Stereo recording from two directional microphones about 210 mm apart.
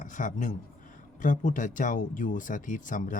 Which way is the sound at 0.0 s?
40° left (ahead or behind).